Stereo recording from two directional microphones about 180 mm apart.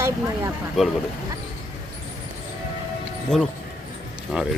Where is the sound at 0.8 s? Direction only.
Centre (ahead or behind).